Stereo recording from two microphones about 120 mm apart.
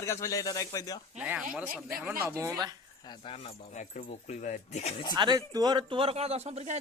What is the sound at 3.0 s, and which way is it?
Speech, 35° left (ahead or behind).